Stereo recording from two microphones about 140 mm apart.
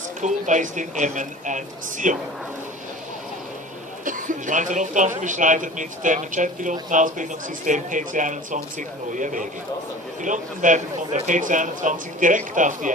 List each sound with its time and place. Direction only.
0.2 s speech: 60° right (ahead or behind)
4.0 s speech: 70° right (ahead or behind)